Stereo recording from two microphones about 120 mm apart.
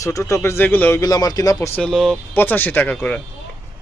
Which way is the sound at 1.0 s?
30° left (ahead or behind).